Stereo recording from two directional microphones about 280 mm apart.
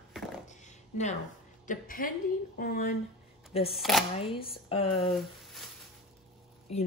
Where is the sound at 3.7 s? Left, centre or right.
Centre.